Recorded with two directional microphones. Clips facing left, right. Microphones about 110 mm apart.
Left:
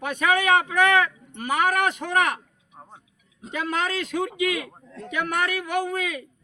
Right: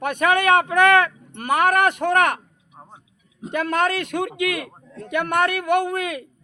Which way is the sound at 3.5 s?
60° right (ahead or behind).